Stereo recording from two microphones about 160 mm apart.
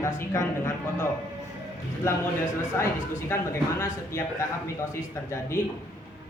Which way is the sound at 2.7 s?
15° left (ahead or behind).